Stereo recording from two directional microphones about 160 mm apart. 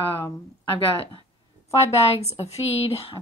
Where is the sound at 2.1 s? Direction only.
40° left (ahead or behind).